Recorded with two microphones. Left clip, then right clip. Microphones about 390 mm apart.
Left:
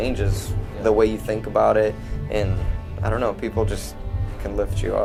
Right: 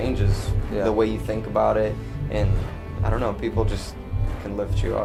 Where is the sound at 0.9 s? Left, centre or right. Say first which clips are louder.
Left 6 dB; left.